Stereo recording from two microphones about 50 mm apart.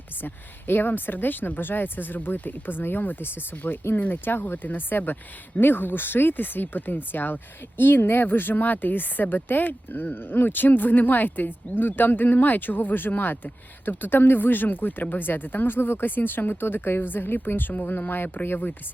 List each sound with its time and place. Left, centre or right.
0.2 s speech: left